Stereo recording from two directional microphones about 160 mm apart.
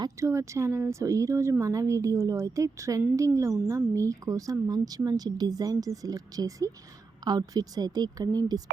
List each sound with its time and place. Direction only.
0.0 s speech: 20° right (ahead or behind)